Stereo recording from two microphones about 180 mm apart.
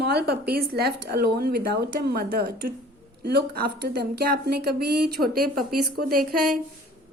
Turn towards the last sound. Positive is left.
turn(degrees=-55)  # may be behind; listen again after turning